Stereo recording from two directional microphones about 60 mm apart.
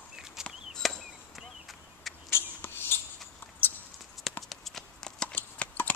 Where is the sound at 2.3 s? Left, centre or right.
Left.